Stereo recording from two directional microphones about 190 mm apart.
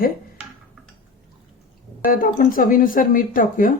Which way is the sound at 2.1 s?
45° left (ahead or behind).